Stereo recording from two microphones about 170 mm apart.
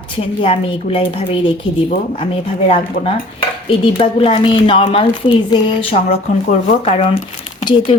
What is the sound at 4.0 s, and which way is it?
A woman's voice, 30° left (ahead or behind).